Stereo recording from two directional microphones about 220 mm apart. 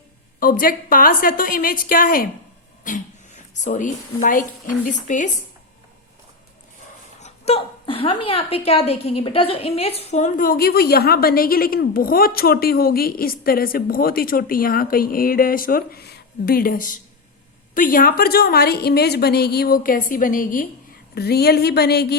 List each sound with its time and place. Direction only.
0.3 s a woman's voice: 40° left (ahead or behind)
7.2 s a woman's voice: 30° left (ahead or behind); by 22.0 s 45° left (ahead or behind)